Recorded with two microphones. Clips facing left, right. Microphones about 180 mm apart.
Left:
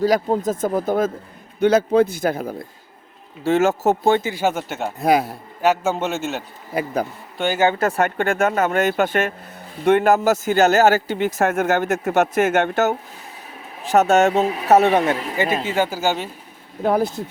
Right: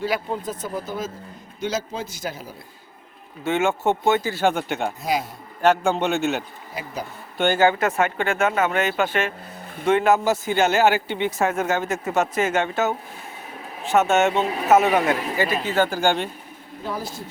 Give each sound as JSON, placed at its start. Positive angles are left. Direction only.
{"t": 0.0, "sound": "speech", "side_deg": 40}
{"t": 3.4, "sound": "speech", "side_deg": 40}
{"t": 4.2, "sound": "speech", "side_deg": 15}
{"t": 4.4, "sound": "a man's voice", "side_deg": 5}
{"t": 4.9, "sound": "speech", "side_deg": 55}
{"t": 5.6, "sound": "a man's voice", "side_deg": 5}
{"t": 6.7, "sound": "speech", "side_deg": 55}
{"t": 7.3, "sound": "speech", "side_deg": 0}
{"t": 7.6, "sound": "speech", "side_deg": 25}
{"t": 7.9, "sound": "speech", "side_deg": 40}
{"t": 9.8, "sound": "speech", "side_deg": 55}
{"t": 11.4, "sound": "speech", "side_deg": 60}
{"t": 13.8, "sound": "speech", "side_deg": 40}
{"t": 16.8, "sound": "speech", "side_deg": 55}